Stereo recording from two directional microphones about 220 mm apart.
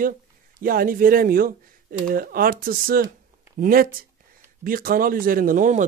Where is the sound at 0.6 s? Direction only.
40° right (ahead or behind).